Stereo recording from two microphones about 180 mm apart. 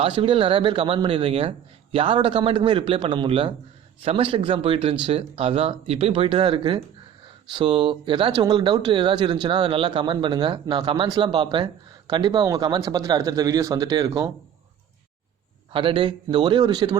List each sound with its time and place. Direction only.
0.0 s speech: 30° right (ahead or behind)
15.7 s speech: 30° right (ahead or behind)